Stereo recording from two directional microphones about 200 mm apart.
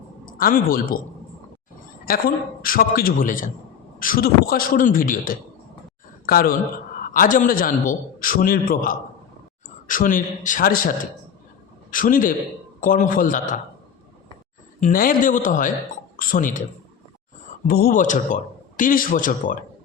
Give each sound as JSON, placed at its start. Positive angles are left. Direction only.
{"t": 0.3, "sound": "speech", "side_deg": 45}
{"t": 2.0, "sound": "a man's voice", "side_deg": 45}
{"t": 14.8, "sound": "a man's voice", "side_deg": 40}
{"t": 17.7, "sound": "a man's voice", "side_deg": 50}